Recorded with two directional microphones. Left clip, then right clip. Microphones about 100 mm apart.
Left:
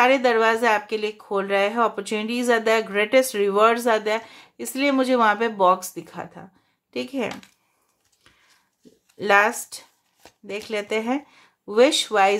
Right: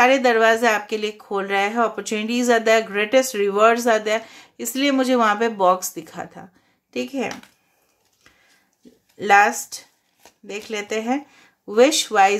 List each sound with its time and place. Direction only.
0.0 s a woman's voice: 30° left (ahead or behind)
9.2 s a woman's voice: 40° left (ahead or behind)